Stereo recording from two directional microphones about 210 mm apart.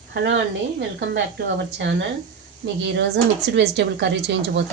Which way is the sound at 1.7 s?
55° right (ahead or behind).